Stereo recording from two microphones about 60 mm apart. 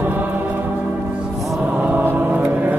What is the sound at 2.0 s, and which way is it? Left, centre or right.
Mantra, right.